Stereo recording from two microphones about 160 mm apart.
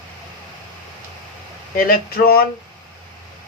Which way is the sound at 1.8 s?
65° left (ahead or behind).